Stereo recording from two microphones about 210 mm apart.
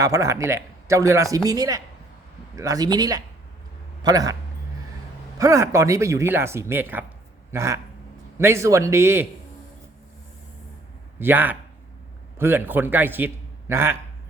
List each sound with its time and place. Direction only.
0.0 s speech: 15° right (ahead or behind)
5.4 s speech: 15° right (ahead or behind)
11.2 s a man's voice: 10° right (ahead or behind)